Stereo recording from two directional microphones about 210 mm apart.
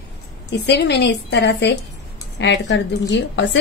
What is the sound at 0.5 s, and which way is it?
A woman's voice, 55° left (ahead or behind).